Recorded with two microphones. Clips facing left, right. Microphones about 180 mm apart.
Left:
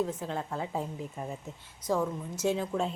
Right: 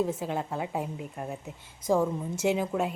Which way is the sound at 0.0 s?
10° right (ahead or behind).